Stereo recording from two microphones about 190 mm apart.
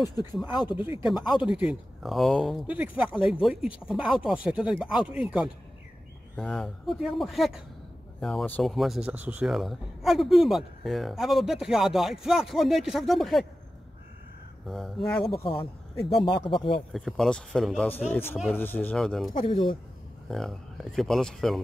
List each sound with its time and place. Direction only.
0.5 s speech: 25° left (ahead or behind)
0.7 s speech: 10° right (ahead or behind)
1.1 s speech: 20° left (ahead or behind)
1.4 s speech: 5° right (ahead or behind)
14.7 s speech: centre (ahead or behind)
15.4 s speech: 30° left (ahead or behind)
16.9 s speech: 5° left (ahead or behind)